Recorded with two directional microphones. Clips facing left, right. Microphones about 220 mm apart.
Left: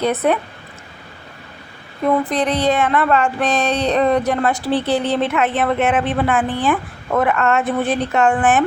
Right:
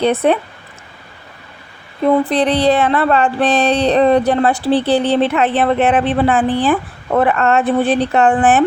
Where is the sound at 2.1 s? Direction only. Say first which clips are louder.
Right 4 dB; 30° right (ahead or behind).